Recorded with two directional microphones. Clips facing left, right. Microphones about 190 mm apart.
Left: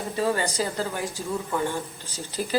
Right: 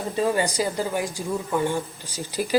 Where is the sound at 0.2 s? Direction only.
15° right (ahead or behind).